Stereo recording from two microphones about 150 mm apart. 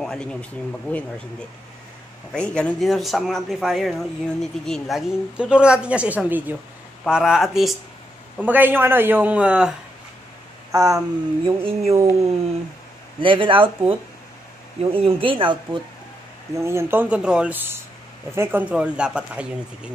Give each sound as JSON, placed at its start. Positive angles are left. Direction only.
{"t": 0.0, "sound": "speech", "side_deg": 5}
{"t": 2.3, "sound": "speech", "side_deg": 5}
{"t": 10.7, "sound": "a sound", "side_deg": -20}
{"t": 11.4, "sound": "speech", "side_deg": -40}
{"t": 13.2, "sound": "speech", "side_deg": -35}
{"t": 16.5, "sound": "speech", "side_deg": -15}